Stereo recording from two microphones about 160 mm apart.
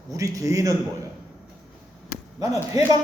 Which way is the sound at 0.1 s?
20° right (ahead or behind).